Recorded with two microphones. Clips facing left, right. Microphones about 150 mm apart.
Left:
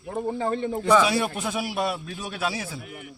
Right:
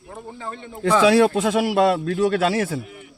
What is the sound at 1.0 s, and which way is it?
Speech, 90° right.